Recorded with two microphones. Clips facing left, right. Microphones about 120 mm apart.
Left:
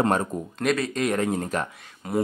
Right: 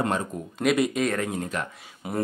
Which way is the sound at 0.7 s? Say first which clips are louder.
Right 4 dB; 15° right (ahead or behind).